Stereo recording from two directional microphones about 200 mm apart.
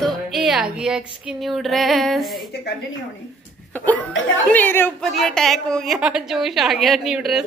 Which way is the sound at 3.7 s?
10° left (ahead or behind).